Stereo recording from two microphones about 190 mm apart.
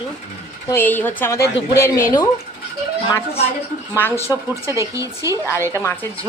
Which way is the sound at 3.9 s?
10° left (ahead or behind).